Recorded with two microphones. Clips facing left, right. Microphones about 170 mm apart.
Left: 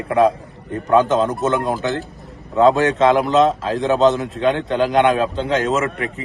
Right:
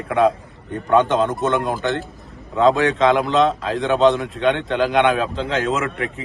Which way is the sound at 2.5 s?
35° left (ahead or behind).